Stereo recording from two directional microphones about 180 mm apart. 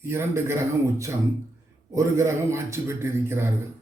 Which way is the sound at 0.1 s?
15° right (ahead or behind).